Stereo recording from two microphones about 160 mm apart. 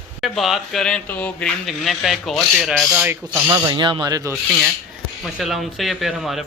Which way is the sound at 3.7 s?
30° right (ahead or behind).